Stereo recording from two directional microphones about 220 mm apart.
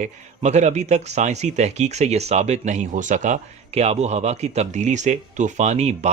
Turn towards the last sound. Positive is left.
turn(degrees=-30)  # may be behind; listen again after turning